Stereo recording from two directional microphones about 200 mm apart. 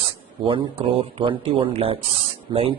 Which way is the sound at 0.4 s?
25° right (ahead or behind).